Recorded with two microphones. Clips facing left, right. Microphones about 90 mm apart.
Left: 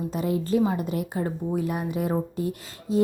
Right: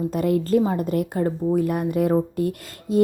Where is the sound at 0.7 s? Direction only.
45° right (ahead or behind).